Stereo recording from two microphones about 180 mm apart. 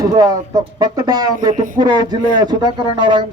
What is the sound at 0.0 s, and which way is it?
A man's voice, 20° right (ahead or behind).